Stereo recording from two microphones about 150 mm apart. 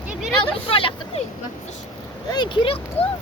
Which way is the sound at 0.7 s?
35° left (ahead or behind).